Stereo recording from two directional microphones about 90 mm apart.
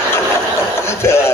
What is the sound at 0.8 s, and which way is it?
Chuckle, 30° left (ahead or behind).